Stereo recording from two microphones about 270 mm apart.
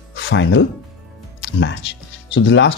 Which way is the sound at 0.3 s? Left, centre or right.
Left.